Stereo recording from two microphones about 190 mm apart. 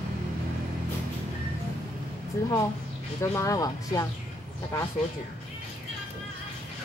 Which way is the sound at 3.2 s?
15° left (ahead or behind).